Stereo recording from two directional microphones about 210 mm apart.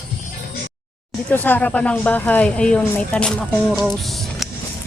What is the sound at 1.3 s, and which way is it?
Speech, 10° left (ahead or behind).